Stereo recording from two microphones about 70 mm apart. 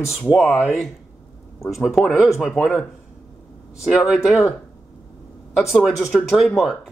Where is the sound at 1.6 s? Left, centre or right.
Centre.